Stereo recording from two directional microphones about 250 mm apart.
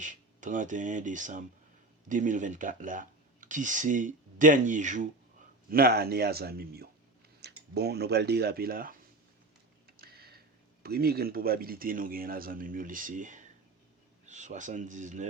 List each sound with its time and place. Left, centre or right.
0.0 s speech: right
9.8 s computer keyboard: right
10.8 s speech: right